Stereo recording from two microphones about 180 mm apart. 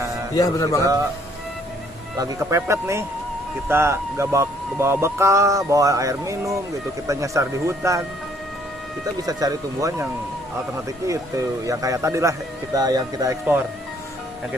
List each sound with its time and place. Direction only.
0.3 s a man's voice: 20° left (ahead or behind)
2.1 s speech: 20° right (ahead or behind)
9.1 s speech: 20° right (ahead or behind)